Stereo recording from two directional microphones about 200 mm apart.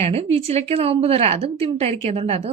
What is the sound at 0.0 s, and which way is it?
A woman's voice, 30° right (ahead or behind).